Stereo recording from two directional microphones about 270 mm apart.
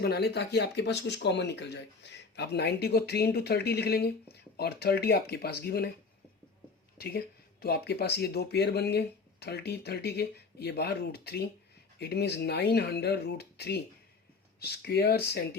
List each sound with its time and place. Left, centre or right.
0.0 s speech: left
7.0 s speech: left